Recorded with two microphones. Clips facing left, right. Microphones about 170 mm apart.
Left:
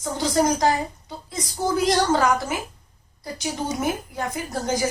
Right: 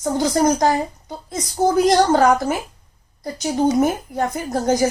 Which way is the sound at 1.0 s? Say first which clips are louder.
Right 4 dB; 45° right (ahead or behind).